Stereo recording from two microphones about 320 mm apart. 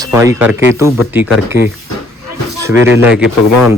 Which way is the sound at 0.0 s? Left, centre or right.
Centre.